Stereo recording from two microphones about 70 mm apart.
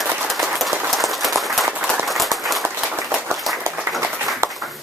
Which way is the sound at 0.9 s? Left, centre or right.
Centre.